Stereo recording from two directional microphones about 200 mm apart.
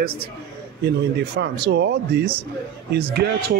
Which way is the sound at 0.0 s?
50° right (ahead or behind).